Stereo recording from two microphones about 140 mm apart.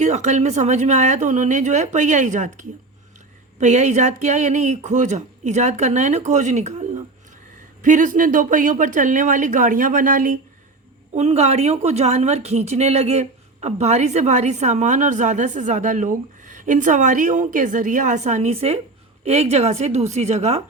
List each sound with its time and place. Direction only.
0.0 s a woman's voice: 55° right (ahead or behind); by 10.3 s 75° right (ahead or behind)
11.1 s a woman's voice: 50° right (ahead or behind)